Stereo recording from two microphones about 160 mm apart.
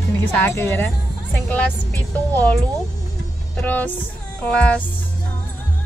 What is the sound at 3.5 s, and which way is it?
Music, 10° left (ahead or behind).